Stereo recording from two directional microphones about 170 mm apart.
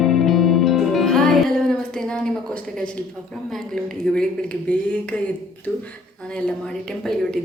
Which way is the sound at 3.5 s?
5° left (ahead or behind).